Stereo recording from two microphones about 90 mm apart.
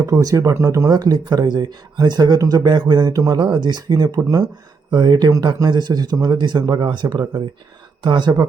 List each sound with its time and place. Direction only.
0.0 s speech: 40° right (ahead or behind)
3.4 s speech: 55° right (ahead or behind)